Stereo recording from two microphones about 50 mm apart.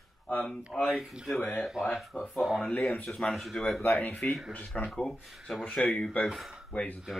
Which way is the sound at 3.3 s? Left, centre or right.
Centre.